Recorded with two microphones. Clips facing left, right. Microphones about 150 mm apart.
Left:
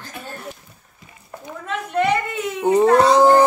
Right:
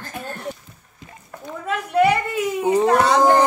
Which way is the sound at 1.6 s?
5° right (ahead or behind).